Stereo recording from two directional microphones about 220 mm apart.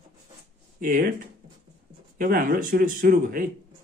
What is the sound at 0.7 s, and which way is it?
Speech, 40° right (ahead or behind).